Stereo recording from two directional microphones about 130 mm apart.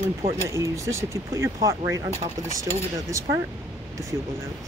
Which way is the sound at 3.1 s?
25° right (ahead or behind).